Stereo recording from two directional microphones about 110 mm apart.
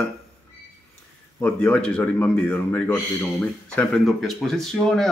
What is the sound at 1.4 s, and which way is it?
Speech, 15° left (ahead or behind).